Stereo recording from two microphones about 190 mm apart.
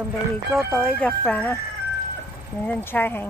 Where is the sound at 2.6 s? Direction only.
10° left (ahead or behind).